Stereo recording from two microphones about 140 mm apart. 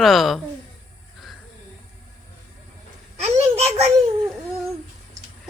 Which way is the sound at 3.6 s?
50° right (ahead or behind).